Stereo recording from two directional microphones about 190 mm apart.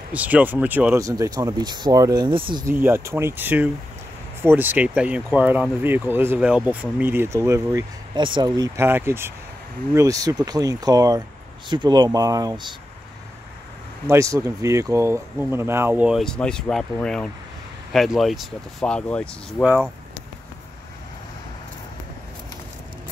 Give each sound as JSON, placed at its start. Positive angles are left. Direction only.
{"t": 0.1, "sound": "speech", "side_deg": -10}
{"t": 2.6, "sound": "speech", "side_deg": -10}
{"t": 14.0, "sound": "speech", "side_deg": -15}